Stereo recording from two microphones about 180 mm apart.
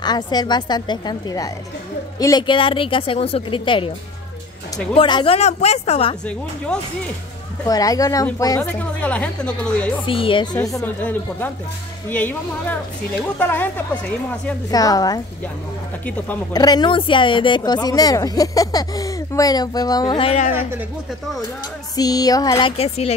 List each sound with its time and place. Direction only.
0.0 s speech: 25° left (ahead or behind)
4.9 s speech: 30° left (ahead or behind)
7.6 s speech: 20° left (ahead or behind)
8.7 s speech: 10° left (ahead or behind)
10.0 s speech: 30° left (ahead or behind); by 13.8 s 10° left (ahead or behind)
14.7 s speech: 20° left (ahead or behind)
16.5 s speech: 25° left (ahead or behind)
21.9 s speech: 20° left (ahead or behind)